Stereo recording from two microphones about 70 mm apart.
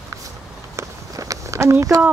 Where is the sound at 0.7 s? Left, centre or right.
Right.